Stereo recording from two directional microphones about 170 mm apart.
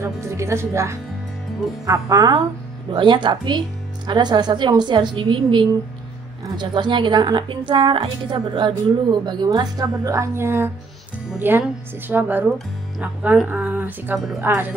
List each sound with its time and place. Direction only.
0.0 s a woman's voice: 15° right (ahead or behind)
14.1 s a woman's voice: centre (ahead or behind)
14.4 s speech: 15° right (ahead or behind)